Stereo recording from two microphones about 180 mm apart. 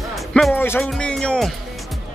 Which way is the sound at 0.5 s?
10° left (ahead or behind).